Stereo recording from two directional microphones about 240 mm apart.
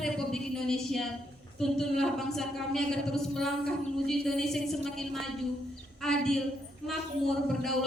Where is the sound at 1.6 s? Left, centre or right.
Centre.